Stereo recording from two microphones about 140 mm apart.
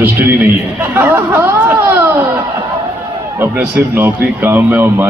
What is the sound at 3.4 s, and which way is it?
A woman's voice, 15° right (ahead or behind).